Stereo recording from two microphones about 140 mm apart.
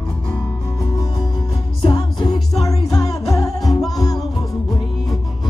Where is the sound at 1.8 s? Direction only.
30° left (ahead or behind).